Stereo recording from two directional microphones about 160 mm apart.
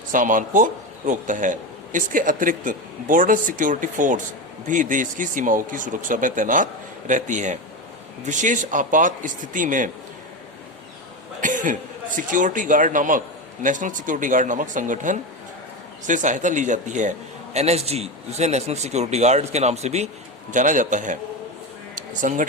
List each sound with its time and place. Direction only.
0.1 s a man's voice: 55° right (ahead or behind)
11.3 s a man's voice: 55° right (ahead or behind)
21.9 s a sound: 55° right (ahead or behind)